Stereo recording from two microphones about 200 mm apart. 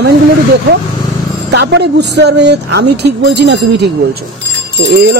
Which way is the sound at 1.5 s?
60° right (ahead or behind).